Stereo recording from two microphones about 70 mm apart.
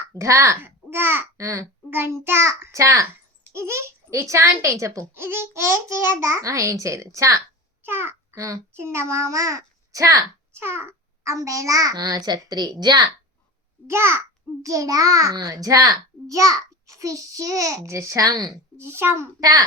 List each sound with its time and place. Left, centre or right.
0.1 s a child's voice: right
1.4 s a child's voice: right
1.9 s a child's voice: right
3.5 s a child's voice: right
7.9 s a child's voice: right
8.4 s a child's voice: right
8.7 s a child's voice: right
10.5 s a child's voice: right
13.8 s a child's voice: right
14.6 s a child's voice: right
18.3 s speech: right
18.8 s a child's voice: right
19.4 s a child's voice: right